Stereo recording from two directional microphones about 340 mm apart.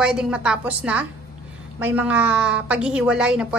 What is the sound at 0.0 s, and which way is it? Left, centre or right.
A woman's voice, centre.